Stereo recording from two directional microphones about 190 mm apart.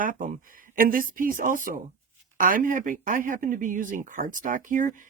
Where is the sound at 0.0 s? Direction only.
45° right (ahead or behind).